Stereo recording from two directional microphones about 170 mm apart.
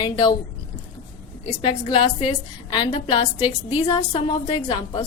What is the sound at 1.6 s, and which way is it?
A woman's voice, 30° left (ahead or behind).